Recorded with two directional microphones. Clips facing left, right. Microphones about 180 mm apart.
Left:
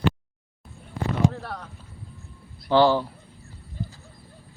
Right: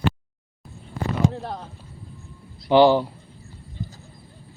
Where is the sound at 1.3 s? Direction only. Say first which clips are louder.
Right 3 dB; 20° right (ahead or behind).